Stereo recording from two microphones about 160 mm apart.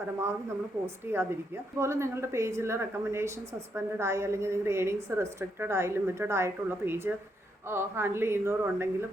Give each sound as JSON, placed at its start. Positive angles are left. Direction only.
{"t": 1.1, "sound": "a woman's voice", "side_deg": -15}